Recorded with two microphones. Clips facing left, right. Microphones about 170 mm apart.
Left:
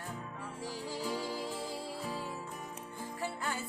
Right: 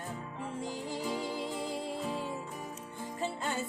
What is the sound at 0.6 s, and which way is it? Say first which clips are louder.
Music: right 1 dB; 20° right (ahead or behind).